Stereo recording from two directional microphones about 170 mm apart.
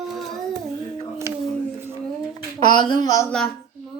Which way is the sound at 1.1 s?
15° right (ahead or behind).